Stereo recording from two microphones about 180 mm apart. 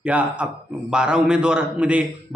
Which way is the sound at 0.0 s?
5° right (ahead or behind).